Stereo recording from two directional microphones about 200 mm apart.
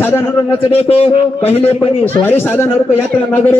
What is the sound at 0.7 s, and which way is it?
A man's voice, 30° left (ahead or behind).